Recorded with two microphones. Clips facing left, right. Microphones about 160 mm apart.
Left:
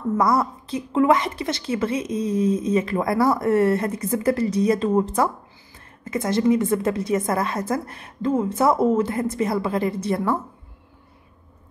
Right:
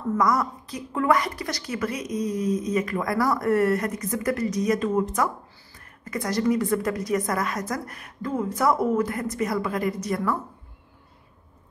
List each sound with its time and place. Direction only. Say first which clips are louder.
0.2 s a woman's voice: left 3 dB; 30° left (ahead or behind)